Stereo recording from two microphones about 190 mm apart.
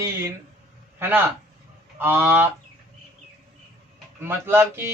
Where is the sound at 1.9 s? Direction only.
10° right (ahead or behind).